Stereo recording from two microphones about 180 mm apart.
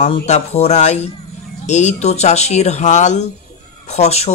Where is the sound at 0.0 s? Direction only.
35° left (ahead or behind).